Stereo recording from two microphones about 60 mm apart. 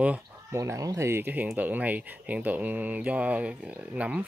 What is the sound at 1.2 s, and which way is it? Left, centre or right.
Speech, right.